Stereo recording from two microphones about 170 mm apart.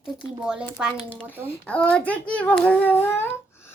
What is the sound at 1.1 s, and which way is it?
A child's voice, 10° left (ahead or behind).